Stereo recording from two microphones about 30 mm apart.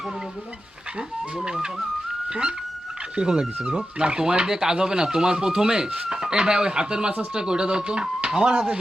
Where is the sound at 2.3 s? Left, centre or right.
Right.